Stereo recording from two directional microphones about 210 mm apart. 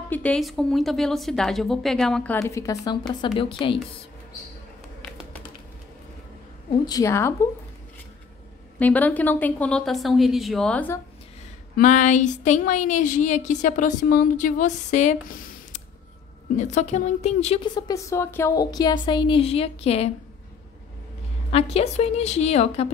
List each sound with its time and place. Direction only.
0.1 s a woman's voice: 5° left (ahead or behind)
2.3 s a woman's voice: 15° left (ahead or behind)
6.9 s a woman's voice: 15° left (ahead or behind)
8.7 s a woman's voice: 5° left (ahead or behind)
11.7 s speech: 35° left (ahead or behind)
17.7 s a woman's voice: 15° left (ahead or behind)
21.5 s speech: 30° left (ahead or behind)